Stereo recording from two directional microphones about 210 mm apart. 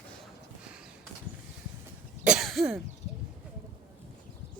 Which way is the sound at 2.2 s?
5° right (ahead or behind).